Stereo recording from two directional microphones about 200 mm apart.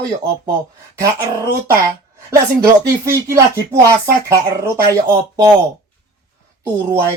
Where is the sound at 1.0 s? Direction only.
15° right (ahead or behind).